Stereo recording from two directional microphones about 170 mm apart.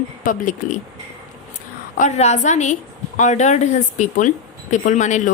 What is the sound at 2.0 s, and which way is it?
A woman's voice, 45° left (ahead or behind).